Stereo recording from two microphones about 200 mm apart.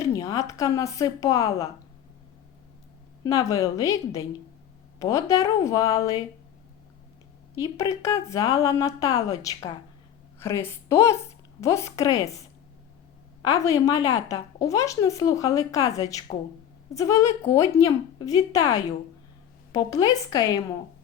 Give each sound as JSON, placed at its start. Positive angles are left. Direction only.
{"t": 0.0, "sound": "a woman's voice", "side_deg": 15}
{"t": 3.2, "sound": "a woman's voice", "side_deg": 15}
{"t": 7.6, "sound": "a woman's voice", "side_deg": 15}
{"t": 13.5, "sound": "a woman's voice", "side_deg": 15}